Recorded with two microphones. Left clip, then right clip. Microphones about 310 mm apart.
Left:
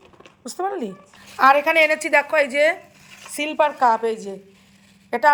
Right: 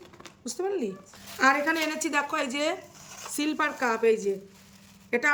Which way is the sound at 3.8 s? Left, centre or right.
Centre.